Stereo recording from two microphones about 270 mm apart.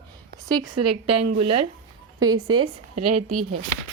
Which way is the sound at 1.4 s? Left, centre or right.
Right.